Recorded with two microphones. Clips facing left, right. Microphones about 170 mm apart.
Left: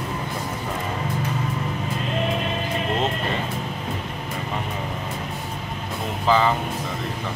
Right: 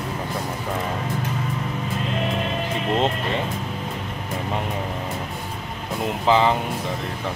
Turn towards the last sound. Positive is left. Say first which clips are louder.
# right 1 dB
turn(degrees=-20)  # may be behind; listen again after turning